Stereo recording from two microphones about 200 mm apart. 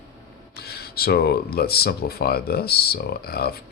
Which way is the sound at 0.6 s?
50° left (ahead or behind).